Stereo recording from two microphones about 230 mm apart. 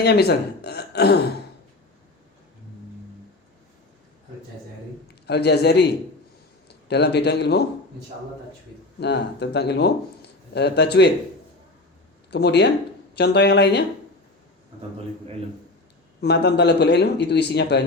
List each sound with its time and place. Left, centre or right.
0.0 s speech: left
5.2 s a man's voice: left
6.8 s speech: left
9.0 s speech: left
12.3 s speech: left
16.2 s speech: left